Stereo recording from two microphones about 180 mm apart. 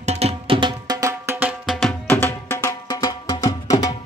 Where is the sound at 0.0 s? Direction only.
35° right (ahead or behind); by 1.5 s 15° right (ahead or behind).